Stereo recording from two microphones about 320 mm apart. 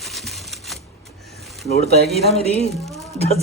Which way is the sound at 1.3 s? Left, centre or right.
Centre.